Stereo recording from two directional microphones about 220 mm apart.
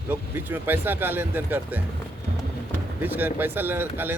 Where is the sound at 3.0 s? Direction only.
10° right (ahead or behind).